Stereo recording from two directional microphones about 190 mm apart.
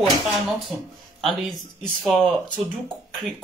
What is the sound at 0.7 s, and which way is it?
Speech, 5° right (ahead or behind).